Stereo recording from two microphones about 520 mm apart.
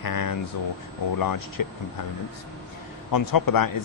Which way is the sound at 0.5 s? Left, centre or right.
Left.